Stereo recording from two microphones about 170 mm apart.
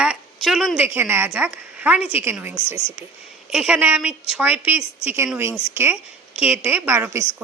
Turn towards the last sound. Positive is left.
turn(degrees=-15)  # may be behind; listen again after turning